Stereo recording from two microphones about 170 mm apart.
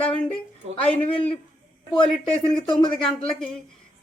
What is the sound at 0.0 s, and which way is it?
Speech, 5° left (ahead or behind).